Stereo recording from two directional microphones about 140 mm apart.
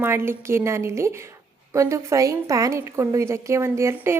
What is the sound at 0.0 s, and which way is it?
A woman's voice, 15° right (ahead or behind).